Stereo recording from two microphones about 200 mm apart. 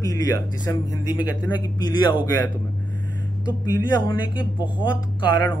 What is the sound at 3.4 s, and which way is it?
Speech, 20° left (ahead or behind).